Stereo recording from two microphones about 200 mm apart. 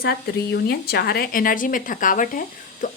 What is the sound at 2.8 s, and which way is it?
Music, 40° left (ahead or behind).